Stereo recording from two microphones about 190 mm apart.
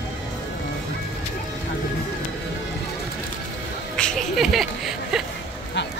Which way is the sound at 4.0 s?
Centre (ahead or behind).